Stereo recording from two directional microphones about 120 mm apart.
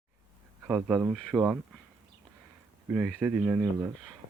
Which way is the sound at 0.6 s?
15° right (ahead or behind).